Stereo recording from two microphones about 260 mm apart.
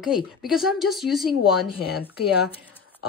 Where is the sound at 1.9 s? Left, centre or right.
Left.